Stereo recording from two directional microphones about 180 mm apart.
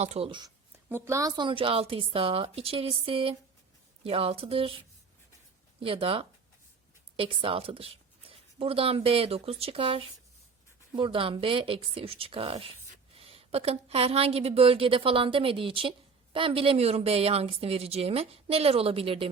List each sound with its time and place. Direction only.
0.0 s speech: 35° right (ahead or behind)
0.9 s a woman's voice: 15° right (ahead or behind); by 4.8 s 30° right (ahead or behind)
5.8 s a woman's voice: 30° right (ahead or behind)